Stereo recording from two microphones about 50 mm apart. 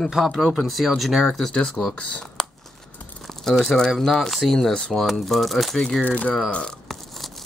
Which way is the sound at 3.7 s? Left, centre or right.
Centre.